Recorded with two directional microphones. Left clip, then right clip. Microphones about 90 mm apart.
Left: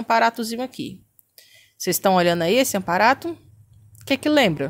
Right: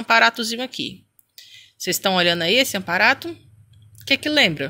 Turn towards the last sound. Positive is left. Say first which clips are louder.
# even
turn(degrees=55)  # may be behind; listen again after turning